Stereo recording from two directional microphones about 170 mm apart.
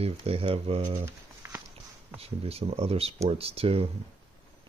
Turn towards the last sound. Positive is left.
turn(degrees=-35)  # may be behind; listen again after turning